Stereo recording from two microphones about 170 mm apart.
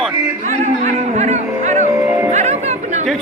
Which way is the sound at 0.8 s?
40° right (ahead or behind).